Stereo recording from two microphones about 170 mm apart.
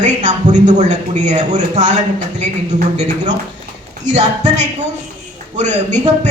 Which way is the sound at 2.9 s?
45° right (ahead or behind).